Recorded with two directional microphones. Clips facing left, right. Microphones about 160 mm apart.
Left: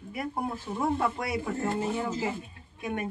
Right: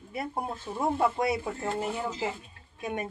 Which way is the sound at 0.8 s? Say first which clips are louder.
Right 2 dB; 25° right (ahead or behind).